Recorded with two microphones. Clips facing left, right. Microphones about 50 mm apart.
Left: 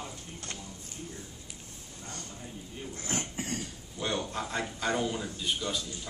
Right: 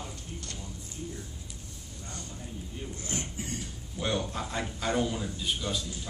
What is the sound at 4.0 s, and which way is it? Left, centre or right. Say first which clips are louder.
A man's voice: right 1 dB; centre.